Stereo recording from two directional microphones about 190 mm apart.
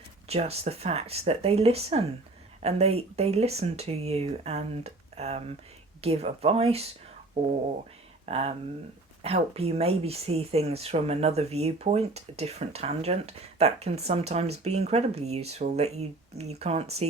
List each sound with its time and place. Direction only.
0.3 s speech: 35° right (ahead or behind)
8.3 s speech: 30° right (ahead or behind)